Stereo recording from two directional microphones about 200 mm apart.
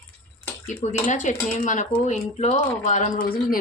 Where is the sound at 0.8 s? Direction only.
35° left (ahead or behind).